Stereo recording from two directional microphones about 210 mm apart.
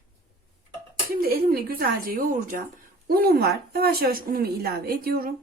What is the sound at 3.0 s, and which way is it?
Speech, 45° right (ahead or behind).